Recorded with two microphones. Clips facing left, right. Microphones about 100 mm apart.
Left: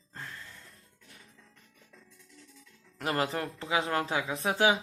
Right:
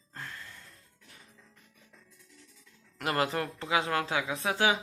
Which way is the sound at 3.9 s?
30° left (ahead or behind).